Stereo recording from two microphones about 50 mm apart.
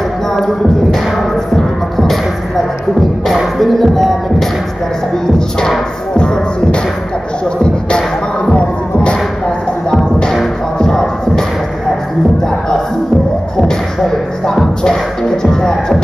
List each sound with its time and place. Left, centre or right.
3.5 s music: centre
6.1 s music: centre
8.5 s music: left
10.8 s music: centre
14.4 s music: centre